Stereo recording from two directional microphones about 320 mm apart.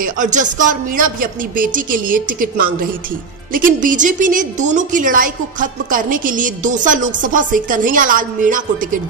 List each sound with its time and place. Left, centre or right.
0.2 s a woman's voice: right